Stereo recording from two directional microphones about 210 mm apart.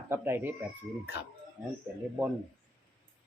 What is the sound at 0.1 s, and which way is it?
Speech, 10° right (ahead or behind).